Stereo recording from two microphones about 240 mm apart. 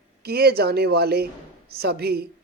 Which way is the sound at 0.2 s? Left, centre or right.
Right.